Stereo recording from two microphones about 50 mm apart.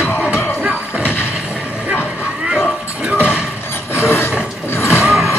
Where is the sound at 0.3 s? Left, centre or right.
Left.